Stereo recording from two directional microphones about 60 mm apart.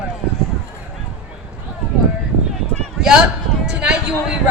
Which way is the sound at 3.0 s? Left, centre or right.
Centre.